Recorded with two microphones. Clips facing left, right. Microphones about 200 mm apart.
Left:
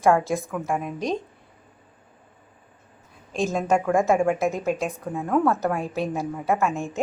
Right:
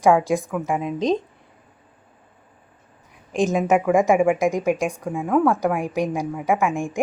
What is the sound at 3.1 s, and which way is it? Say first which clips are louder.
A woman's voice: right 4 dB; 15° right (ahead or behind).